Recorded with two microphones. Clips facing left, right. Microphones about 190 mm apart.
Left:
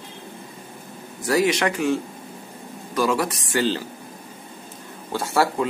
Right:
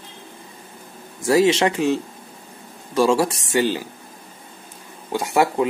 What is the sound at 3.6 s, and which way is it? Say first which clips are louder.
Speech: right 2 dB; 15° right (ahead or behind).